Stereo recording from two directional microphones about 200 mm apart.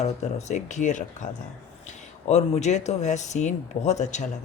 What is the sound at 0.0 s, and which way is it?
Speech, 35° left (ahead or behind).